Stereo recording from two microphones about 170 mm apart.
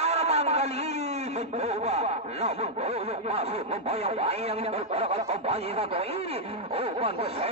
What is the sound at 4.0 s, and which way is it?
Speech, 35° right (ahead or behind).